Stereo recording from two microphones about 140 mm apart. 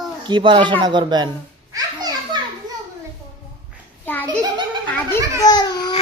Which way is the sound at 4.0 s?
15° left (ahead or behind).